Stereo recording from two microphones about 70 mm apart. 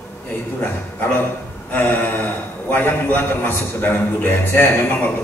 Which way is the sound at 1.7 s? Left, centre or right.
Left.